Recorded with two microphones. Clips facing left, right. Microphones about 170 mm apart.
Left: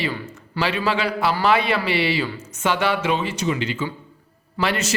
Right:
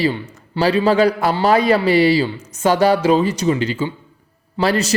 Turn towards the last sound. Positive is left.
turn(degrees=-35)  # may be behind; listen again after turning